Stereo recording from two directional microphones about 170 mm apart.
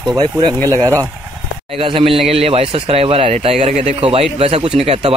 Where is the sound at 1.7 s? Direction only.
35° right (ahead or behind).